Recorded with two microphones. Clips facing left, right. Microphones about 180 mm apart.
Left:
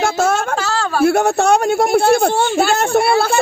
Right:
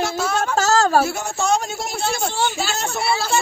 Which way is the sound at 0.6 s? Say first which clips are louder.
Right 3 dB; 45° right (ahead or behind).